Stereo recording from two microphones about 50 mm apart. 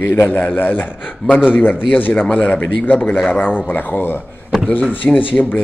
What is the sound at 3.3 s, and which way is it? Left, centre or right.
Speech, left.